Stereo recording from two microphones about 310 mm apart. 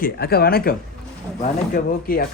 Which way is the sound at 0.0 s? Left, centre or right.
Left.